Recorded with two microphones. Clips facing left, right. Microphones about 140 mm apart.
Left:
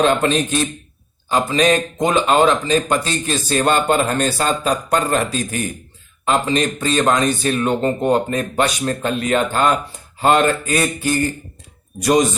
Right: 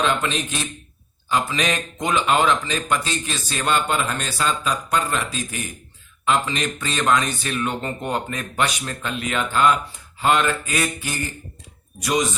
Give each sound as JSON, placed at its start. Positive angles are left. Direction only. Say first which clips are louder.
{"t": 0.0, "sound": "a man's voice", "louder": "left 7 dB", "side_deg": 45}